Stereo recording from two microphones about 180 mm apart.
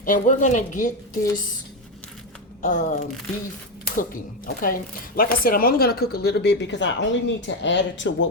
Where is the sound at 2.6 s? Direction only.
45° left (ahead or behind).